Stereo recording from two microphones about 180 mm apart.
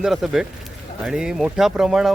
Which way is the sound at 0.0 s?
Centre (ahead or behind).